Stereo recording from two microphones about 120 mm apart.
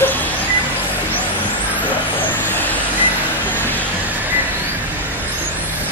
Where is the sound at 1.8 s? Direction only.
15° left (ahead or behind).